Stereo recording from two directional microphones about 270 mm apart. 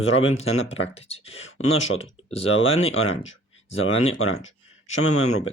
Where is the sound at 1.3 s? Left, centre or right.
Left.